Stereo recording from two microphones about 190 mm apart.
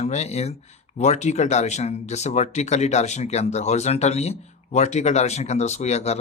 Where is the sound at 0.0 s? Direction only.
35° left (ahead or behind).